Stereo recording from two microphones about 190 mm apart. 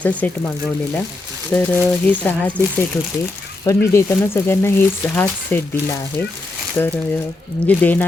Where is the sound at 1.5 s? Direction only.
10° left (ahead or behind).